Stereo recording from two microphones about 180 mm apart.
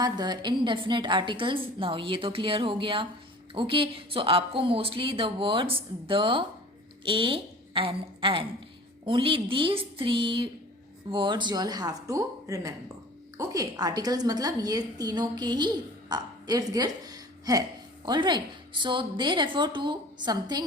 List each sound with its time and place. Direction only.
0.0 s a woman's voice: 25° right (ahead or behind)